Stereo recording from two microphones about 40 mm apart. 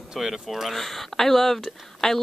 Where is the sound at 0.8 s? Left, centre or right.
Centre.